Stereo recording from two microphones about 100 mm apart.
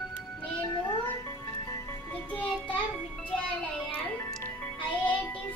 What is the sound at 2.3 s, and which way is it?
Child singing, 15° left (ahead or behind).